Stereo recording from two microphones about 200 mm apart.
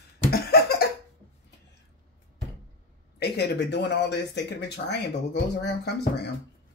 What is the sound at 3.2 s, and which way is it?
Speech, 55° left (ahead or behind).